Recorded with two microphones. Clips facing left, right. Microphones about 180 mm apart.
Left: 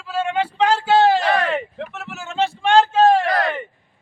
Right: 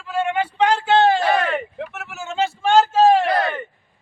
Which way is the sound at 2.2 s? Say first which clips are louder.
Even; centre (ahead or behind).